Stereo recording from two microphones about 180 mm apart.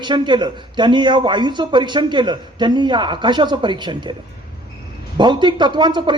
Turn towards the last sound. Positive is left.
turn(degrees=-25)  # may be behind; listen again after turning